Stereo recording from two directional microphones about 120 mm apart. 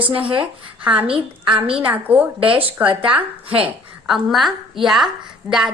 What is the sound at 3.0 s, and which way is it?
Speech, 50° right (ahead or behind).